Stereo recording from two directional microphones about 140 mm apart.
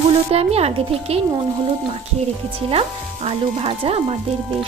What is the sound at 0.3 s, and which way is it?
Speech, 45° right (ahead or behind).